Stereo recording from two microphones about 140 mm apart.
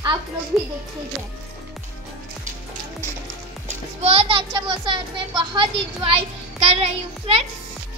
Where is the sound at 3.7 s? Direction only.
45° right (ahead or behind).